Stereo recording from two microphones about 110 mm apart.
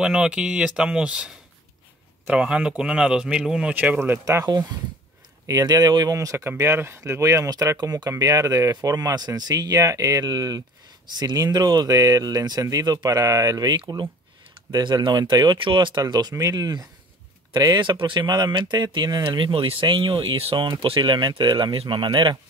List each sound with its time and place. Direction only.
0.0 s a man's voice: 5° right (ahead or behind)
4.0 s speech: 25° right (ahead or behind)
5.5 s speech: 35° right (ahead or behind)